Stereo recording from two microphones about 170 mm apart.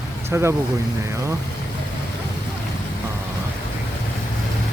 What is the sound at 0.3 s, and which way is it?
Speech, 15° right (ahead or behind).